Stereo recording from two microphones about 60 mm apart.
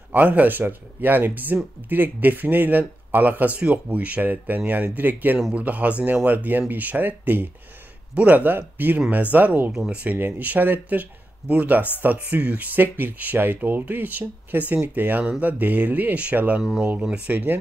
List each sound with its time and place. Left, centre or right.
0.1 s a man's voice: right
17.3 s speech: right